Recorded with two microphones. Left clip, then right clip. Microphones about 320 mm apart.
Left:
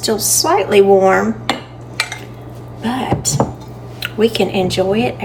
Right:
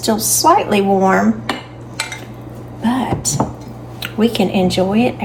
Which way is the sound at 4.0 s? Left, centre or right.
Centre.